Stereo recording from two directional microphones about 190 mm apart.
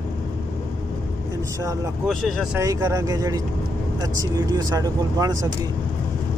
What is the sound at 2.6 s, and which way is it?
Speech, 15° right (ahead or behind).